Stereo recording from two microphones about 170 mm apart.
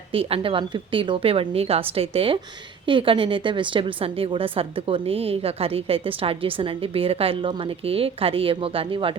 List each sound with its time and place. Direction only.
0.1 s a woman's voice: 35° right (ahead or behind)